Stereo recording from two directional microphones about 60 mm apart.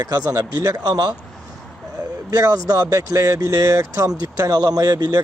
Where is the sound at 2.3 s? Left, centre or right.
Right.